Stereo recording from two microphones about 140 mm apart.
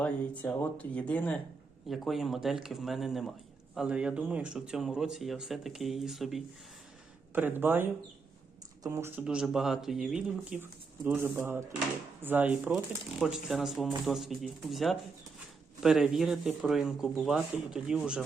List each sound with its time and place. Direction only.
0.0 s speech: 10° left (ahead or behind)
7.3 s speech: 15° right (ahead or behind)
9.2 s speech: 5° right (ahead or behind)